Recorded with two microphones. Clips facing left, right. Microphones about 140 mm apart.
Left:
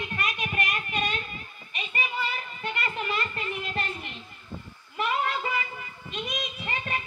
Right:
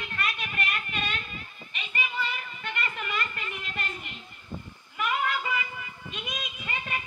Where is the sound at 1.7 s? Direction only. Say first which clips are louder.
Left 2 dB; 30° left (ahead or behind).